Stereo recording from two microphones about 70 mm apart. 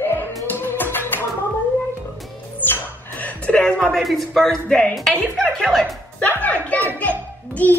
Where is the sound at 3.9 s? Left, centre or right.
Centre.